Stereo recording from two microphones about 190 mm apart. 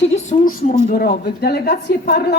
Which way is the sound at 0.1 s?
40° left (ahead or behind).